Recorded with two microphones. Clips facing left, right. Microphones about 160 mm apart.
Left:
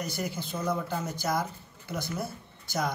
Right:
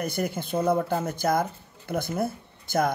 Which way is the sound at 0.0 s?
55° right (ahead or behind).